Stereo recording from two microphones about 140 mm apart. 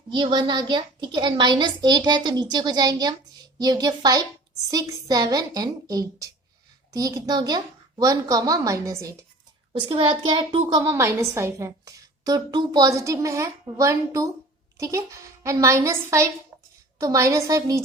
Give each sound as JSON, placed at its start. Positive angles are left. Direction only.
{"t": 0.1, "sound": "a woman's voice", "side_deg": -35}
{"t": 9.8, "sound": "a woman's voice", "side_deg": -35}
{"t": 10.7, "sound": "a woman's voice", "side_deg": -25}